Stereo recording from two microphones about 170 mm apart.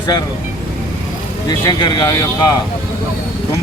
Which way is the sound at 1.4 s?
25° left (ahead or behind).